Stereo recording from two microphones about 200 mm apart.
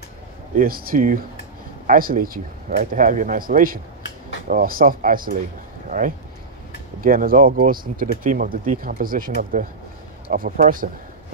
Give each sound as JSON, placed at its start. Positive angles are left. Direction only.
{"t": 0.6, "sound": "speech", "side_deg": -45}